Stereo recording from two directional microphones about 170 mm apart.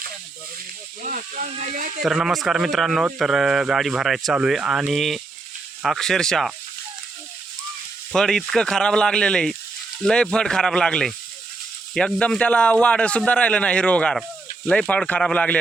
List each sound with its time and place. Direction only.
1.0 s speech: 50° right (ahead or behind)
2.0 s speech: centre (ahead or behind)
8.1 s a man's voice: 5° left (ahead or behind)